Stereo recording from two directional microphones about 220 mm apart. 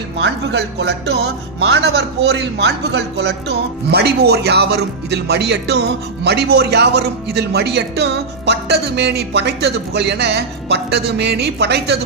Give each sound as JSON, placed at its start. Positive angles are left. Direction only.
{"t": 0.2, "sound": "speech", "side_deg": -50}